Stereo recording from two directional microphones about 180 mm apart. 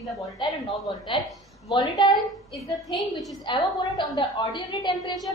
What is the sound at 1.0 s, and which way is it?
A woman's voice, 25° left (ahead or behind).